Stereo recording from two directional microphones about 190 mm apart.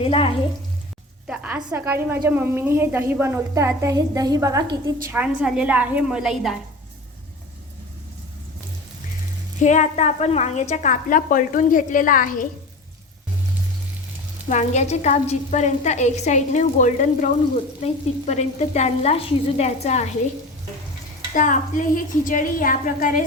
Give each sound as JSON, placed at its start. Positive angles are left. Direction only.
{"t": 0.0, "sound": "speech", "side_deg": 30}
{"t": 1.3, "sound": "a woman's voice", "side_deg": -5}
{"t": 5.0, "sound": "a woman's voice", "side_deg": -5}
{"t": 9.6, "sound": "a woman's voice", "side_deg": 40}
{"t": 14.5, "sound": "a woman's voice", "side_deg": 35}
{"t": 21.3, "sound": "a woman's voice", "side_deg": 45}